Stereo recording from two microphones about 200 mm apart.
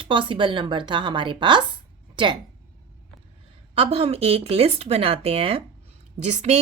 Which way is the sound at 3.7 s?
30° right (ahead or behind).